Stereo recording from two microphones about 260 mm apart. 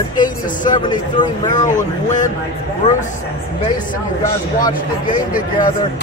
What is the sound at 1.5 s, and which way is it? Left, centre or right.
Speech, left.